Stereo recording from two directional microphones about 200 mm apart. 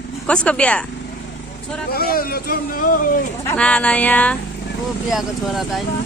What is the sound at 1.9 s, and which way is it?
Speech, 50° left (ahead or behind).